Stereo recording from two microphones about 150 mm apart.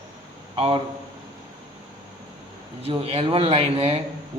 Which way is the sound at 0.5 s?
40° right (ahead or behind).